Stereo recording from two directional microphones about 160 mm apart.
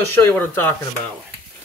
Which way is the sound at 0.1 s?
10° left (ahead or behind).